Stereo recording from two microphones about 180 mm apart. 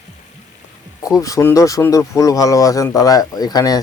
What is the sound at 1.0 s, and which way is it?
Speech, 20° left (ahead or behind).